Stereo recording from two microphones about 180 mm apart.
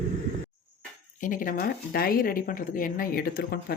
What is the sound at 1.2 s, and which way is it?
Speech, 50° left (ahead or behind).